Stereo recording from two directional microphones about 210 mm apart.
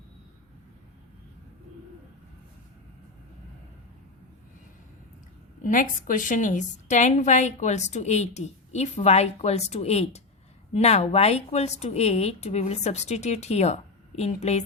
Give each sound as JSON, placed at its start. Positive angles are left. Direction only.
{"t": 5.6, "sound": "a woman's voice", "side_deg": 40}